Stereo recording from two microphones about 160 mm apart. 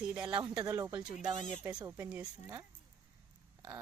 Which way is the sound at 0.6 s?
20° right (ahead or behind).